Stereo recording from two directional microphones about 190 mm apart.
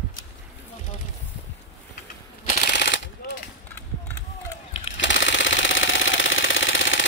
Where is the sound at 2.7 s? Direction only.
70° left (ahead or behind).